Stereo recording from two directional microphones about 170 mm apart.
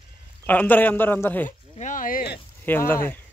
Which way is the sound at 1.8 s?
50° left (ahead or behind).